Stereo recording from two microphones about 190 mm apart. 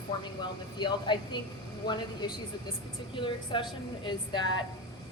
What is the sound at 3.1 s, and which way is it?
Speech, 25° left (ahead or behind).